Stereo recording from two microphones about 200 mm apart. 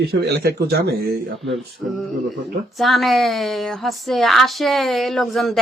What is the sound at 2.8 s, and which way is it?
A woman's voice, centre (ahead or behind).